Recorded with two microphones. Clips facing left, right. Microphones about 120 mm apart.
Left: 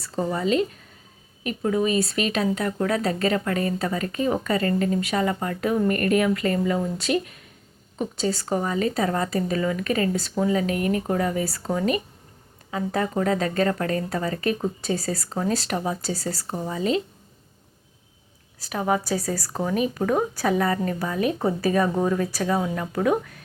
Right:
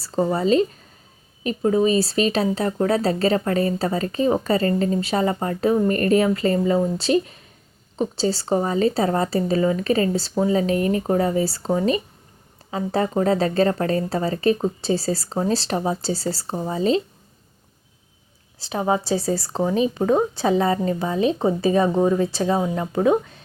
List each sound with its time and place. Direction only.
0.0 s a woman's voice: 30° right (ahead or behind)
18.6 s a woman's voice: 25° right (ahead or behind)